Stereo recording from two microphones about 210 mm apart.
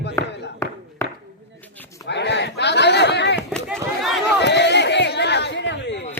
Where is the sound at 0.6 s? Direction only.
15° left (ahead or behind).